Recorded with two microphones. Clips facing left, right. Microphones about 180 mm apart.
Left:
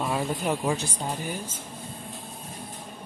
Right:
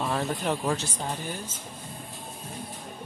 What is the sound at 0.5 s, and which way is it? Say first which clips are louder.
Speech: left 2 dB; 10° left (ahead or behind).